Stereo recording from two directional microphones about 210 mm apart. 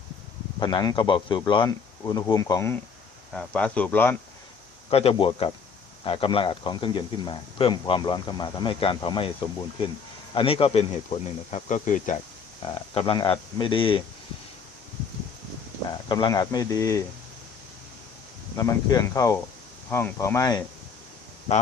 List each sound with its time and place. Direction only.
0.6 s speech: 20° left (ahead or behind)
4.9 s speech: 30° left (ahead or behind)
10.3 s speech: 25° left (ahead or behind)
12.7 s speech: 25° left (ahead or behind)
16.0 s speech: 20° left (ahead or behind)
18.5 s speech: 15° left (ahead or behind)